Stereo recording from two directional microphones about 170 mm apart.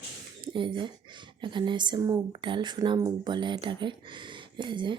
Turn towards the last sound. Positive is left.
turn(degrees=-30)  # may be behind; listen again after turning